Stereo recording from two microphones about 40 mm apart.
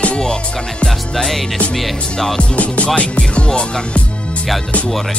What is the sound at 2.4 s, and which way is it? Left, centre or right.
Music, left.